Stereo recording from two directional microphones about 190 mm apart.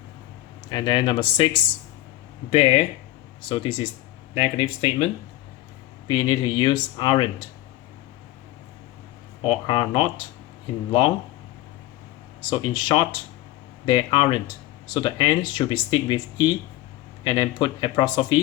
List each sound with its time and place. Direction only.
0.7 s speech: 25° left (ahead or behind)
2.5 s speech: 30° left (ahead or behind)
6.1 s speech: 20° left (ahead or behind)
9.4 s speech: 25° left (ahead or behind)
12.4 s speech: 25° left (ahead or behind)